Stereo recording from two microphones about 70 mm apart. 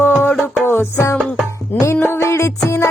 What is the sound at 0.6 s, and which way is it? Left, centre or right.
Music, left.